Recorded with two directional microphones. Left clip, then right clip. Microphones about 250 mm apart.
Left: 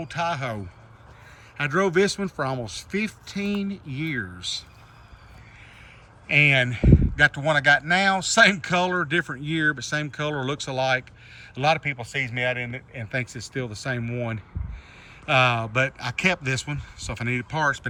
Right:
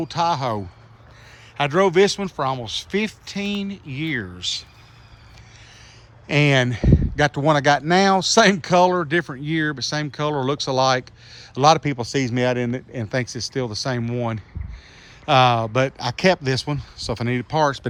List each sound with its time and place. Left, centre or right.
0.1 s speech: centre
1.5 s speech: centre
6.2 s speech: centre
12.1 s speech: right
13.1 s speech: centre